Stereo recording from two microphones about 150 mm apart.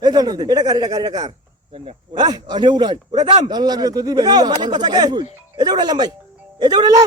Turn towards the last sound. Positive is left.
turn(degrees=-25)  # may be behind; listen again after turning